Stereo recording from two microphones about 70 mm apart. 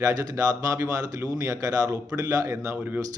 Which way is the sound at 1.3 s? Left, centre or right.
Right.